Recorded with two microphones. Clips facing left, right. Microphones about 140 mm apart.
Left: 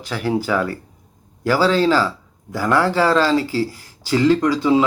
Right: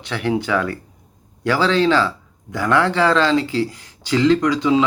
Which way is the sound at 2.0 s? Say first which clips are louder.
Even; 5° left (ahead or behind).